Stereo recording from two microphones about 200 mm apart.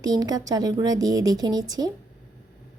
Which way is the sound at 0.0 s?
20° right (ahead or behind).